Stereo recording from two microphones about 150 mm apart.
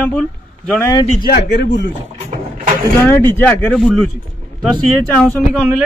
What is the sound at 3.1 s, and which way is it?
Speech, 15° left (ahead or behind).